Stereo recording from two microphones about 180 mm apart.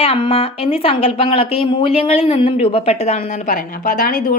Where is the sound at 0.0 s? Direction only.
30° left (ahead or behind).